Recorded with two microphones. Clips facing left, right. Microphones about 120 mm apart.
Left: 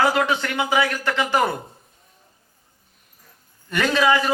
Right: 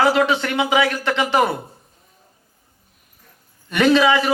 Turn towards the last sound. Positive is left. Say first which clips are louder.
# right 4 dB
turn(degrees=-20)  # may be behind; listen again after turning